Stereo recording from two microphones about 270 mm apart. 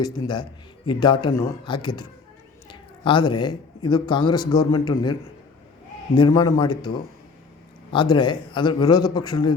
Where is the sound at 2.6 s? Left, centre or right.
Centre.